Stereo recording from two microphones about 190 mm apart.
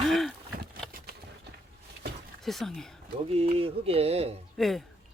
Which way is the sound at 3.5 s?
30° right (ahead or behind).